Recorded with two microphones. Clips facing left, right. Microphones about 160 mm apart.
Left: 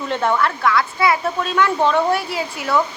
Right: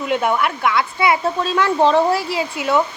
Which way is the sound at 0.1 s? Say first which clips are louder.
Even; 10° right (ahead or behind).